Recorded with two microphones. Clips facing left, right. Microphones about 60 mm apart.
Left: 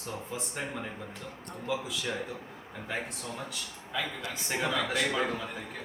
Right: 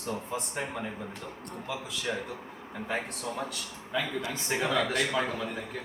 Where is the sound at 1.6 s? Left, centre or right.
Centre.